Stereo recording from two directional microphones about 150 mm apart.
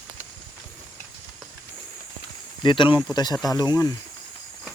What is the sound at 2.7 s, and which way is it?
Speech, 35° left (ahead or behind).